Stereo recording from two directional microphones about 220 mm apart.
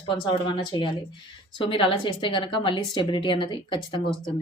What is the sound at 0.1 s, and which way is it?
A woman's voice, 20° left (ahead or behind).